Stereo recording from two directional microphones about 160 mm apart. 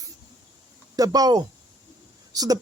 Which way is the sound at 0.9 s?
25° right (ahead or behind).